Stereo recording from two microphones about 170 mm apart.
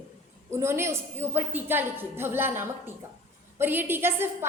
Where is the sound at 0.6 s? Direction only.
15° right (ahead or behind).